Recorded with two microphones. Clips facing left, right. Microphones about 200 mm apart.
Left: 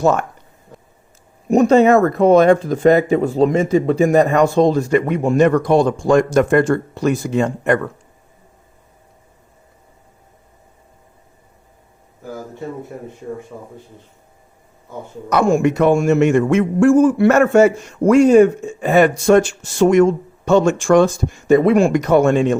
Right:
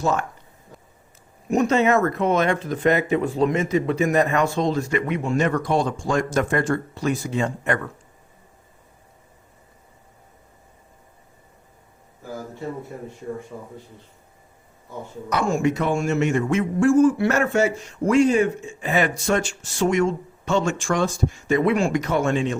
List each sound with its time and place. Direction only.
0.0 s a man's voice: 60° left (ahead or behind)
1.5 s speech: 35° left (ahead or behind); by 5.5 s 55° left (ahead or behind)
5.5 s a man's voice: 65° left (ahead or behind)
15.3 s a man's voice: 60° left (ahead or behind)
19.2 s a man's voice: 60° left (ahead or behind)